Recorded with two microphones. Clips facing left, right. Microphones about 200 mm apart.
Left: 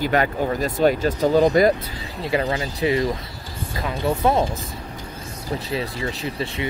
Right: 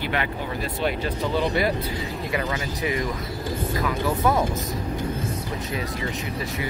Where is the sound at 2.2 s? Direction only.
30° left (ahead or behind).